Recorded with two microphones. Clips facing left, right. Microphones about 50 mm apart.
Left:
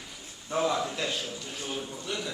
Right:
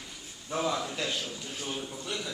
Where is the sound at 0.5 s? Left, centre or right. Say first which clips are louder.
Left 3 dB; centre.